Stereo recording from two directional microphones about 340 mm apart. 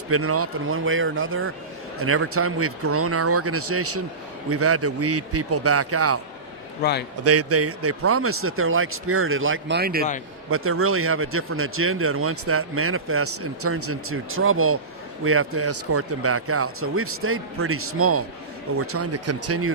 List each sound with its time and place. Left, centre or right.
0.1 s a man's voice: right
6.8 s a man's voice: left
7.3 s speech: right
10.5 s a man's voice: right